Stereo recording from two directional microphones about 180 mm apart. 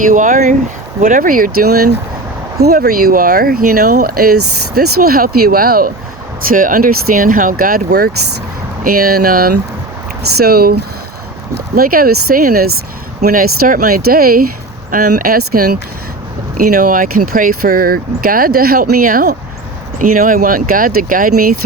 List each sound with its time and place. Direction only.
0.1 s speech: 45° right (ahead or behind)